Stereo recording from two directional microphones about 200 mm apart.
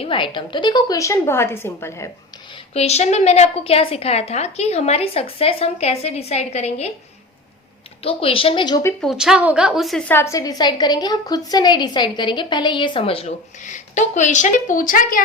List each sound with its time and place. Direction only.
0.0 s a woman's voice: 25° left (ahead or behind)
2.7 s a woman's voice: 30° left (ahead or behind)
8.0 s a woman's voice: 30° left (ahead or behind); by 9.0 s 10° left (ahead or behind)
9.0 s a woman's voice: 5° right (ahead or behind); by 15.2 s 45° left (ahead or behind)